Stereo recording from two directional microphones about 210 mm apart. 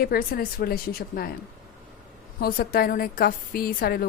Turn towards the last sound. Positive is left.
turn(degrees=45)  # may be behind; listen again after turning